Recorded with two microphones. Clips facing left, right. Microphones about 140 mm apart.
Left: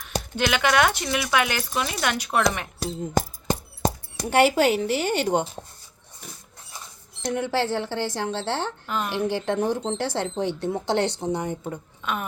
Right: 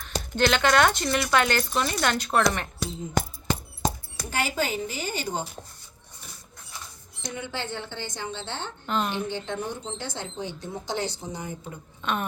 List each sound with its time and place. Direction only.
0.0 s speech: 10° left (ahead or behind)
3.2 s a sound: 40° left (ahead or behind)
4.3 s speech: 70° left (ahead or behind)
7.3 s a woman's voice: 85° left
8.9 s a woman's voice: 5° left (ahead or behind)
9.2 s speech: 90° left; by 11.8 s 65° left (ahead or behind)
12.0 s a woman's voice: 5° left (ahead or behind)